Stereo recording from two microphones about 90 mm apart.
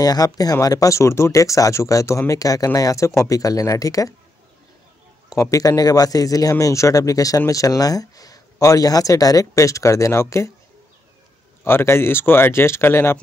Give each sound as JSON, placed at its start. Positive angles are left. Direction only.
{"t": 0.0, "sound": "speech", "side_deg": 45}
{"t": 5.3, "sound": "speech", "side_deg": 40}
{"t": 11.6, "sound": "speech", "side_deg": 25}